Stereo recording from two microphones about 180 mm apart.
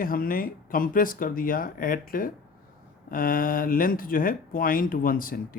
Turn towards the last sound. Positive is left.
turn(degrees=50)  # may be behind; listen again after turning